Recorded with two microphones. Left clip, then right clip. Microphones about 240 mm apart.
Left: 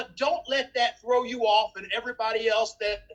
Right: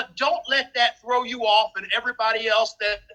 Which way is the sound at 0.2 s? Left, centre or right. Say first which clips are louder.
Right 4 dB; centre.